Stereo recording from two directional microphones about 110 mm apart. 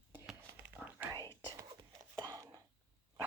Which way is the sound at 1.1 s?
25° left (ahead or behind).